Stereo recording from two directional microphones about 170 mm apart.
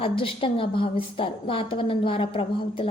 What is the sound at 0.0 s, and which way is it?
A woman's voice, 35° left (ahead or behind).